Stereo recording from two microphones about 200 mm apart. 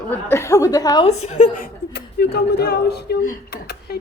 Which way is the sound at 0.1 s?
10° left (ahead or behind).